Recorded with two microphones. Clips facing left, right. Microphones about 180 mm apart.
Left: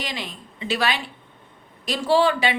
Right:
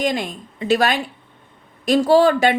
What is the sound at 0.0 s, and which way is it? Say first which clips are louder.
Speech: right 10 dB; 50° right (ahead or behind).